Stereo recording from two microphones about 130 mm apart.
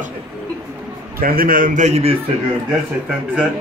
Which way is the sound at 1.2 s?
90° right.